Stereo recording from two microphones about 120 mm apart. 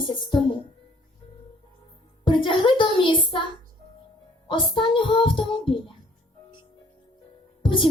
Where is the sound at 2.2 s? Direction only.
45° left (ahead or behind).